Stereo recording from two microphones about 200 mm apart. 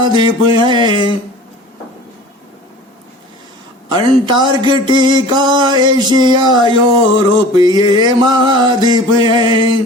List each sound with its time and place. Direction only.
0.0 s music: 20° right (ahead or behind)
3.8 s music: 20° right (ahead or behind)